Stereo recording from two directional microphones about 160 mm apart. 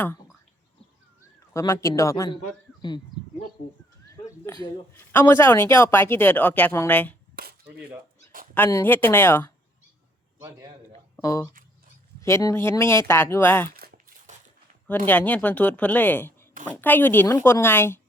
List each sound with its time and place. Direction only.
1.2 s a man's voice: 15° left (ahead or behind)
4.1 s a sound: 20° left (ahead or behind)
5.1 s speech: 15° left (ahead or behind)
7.3 s cap gun: 80° right
8.5 s speech: 15° left (ahead or behind)
11.2 s speech: 20° left (ahead or behind)
13.7 s crumpling: 65° right (ahead or behind)
14.8 s speech: 10° left (ahead or behind)